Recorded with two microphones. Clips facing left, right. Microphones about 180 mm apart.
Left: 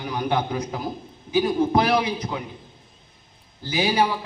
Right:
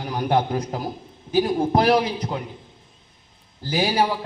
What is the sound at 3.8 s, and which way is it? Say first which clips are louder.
Speech: even; 45° right (ahead or behind).